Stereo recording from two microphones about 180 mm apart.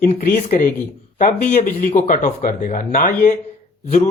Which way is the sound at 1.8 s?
45° left (ahead or behind).